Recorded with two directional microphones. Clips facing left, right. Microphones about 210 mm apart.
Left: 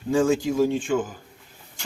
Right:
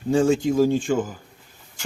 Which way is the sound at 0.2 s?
30° right (ahead or behind).